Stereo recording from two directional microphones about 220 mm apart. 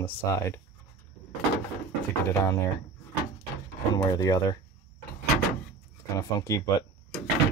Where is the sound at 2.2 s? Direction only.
10° left (ahead or behind).